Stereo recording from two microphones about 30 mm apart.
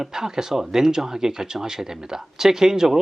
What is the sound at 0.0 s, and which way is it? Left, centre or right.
Speech, centre.